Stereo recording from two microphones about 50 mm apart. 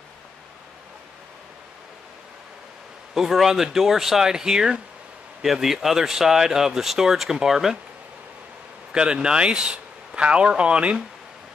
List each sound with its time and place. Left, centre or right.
3.2 s speech: centre
8.9 s speech: centre